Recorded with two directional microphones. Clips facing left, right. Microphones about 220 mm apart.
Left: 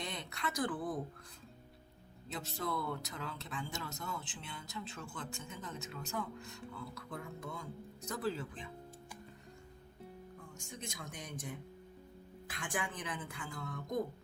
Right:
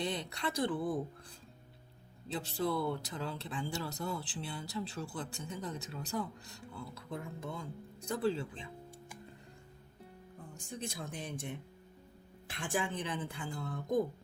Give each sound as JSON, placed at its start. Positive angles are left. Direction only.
{"t": 0.0, "sound": "speech", "side_deg": -30}
{"t": 2.3, "sound": "speech", "side_deg": -30}
{"t": 10.5, "sound": "speech", "side_deg": -35}